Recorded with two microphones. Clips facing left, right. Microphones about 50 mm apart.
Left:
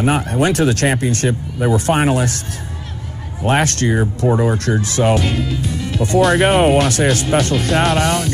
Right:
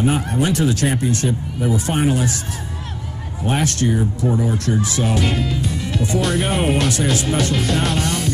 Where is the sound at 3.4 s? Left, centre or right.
Left.